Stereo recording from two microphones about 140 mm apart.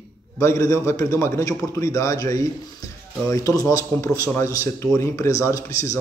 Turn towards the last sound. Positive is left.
turn(degrees=20)  # may be behind; listen again after turning